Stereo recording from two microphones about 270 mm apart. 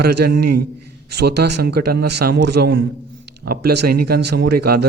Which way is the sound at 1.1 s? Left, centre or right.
Right.